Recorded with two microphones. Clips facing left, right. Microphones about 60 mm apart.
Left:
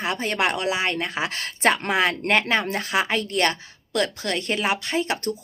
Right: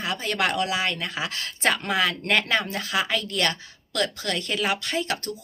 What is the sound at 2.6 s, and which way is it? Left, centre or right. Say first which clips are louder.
A woman's voice: left 3 dB; left.